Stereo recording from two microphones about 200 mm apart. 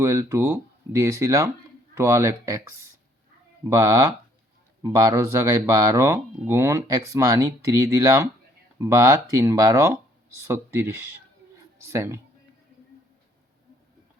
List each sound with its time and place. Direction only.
0.0 s speech: 15° right (ahead or behind)